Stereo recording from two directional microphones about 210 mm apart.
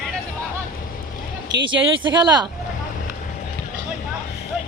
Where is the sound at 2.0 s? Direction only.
20° right (ahead or behind).